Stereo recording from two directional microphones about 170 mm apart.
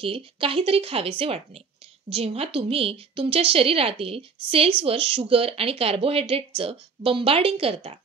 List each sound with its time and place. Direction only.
0.0 s speech: 35° right (ahead or behind)